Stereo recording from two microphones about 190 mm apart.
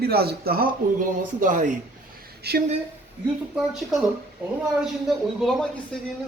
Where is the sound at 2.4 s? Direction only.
55° right (ahead or behind).